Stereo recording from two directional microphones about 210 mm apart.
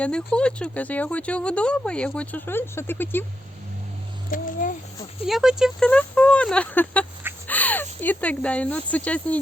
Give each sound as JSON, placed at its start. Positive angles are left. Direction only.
{"t": 0.0, "sound": "speech", "side_deg": 5}
{"t": 4.3, "sound": "a sound", "side_deg": 40}
{"t": 5.2, "sound": "speech", "side_deg": 0}